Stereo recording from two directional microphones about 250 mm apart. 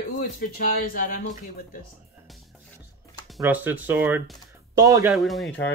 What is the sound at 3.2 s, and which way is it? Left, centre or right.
Speech, centre.